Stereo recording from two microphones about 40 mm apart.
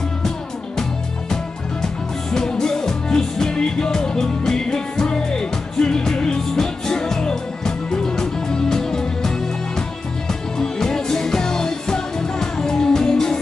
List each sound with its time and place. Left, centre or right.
2.3 s music: centre